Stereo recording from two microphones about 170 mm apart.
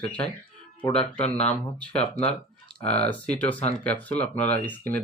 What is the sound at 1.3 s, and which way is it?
Speech, 10° left (ahead or behind).